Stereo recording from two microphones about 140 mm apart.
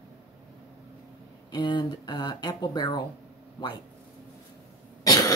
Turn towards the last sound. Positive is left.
turn(degrees=25)  # may be behind; listen again after turning